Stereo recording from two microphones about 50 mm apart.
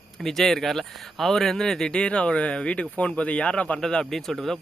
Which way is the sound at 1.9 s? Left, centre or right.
Left.